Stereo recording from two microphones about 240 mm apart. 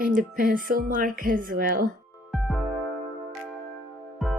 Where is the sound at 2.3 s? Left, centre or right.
Centre.